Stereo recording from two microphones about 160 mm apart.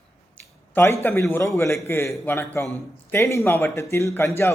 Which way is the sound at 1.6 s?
20° left (ahead or behind).